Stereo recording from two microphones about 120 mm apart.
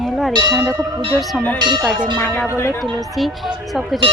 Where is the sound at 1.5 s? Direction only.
40° right (ahead or behind).